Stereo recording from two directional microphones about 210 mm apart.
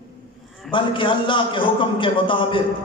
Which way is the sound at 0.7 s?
25° left (ahead or behind).